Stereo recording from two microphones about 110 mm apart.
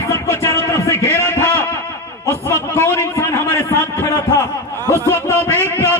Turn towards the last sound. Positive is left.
turn(degrees=20)  # may be behind; listen again after turning